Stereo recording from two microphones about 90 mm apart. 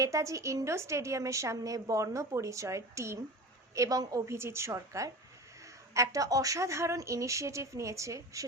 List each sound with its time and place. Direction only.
0.0 s a woman's voice: 35° right (ahead or behind)
4.4 s a woman's voice: 30° right (ahead or behind)